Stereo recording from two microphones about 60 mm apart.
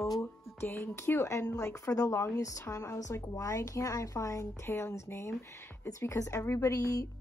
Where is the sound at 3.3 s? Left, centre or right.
Left.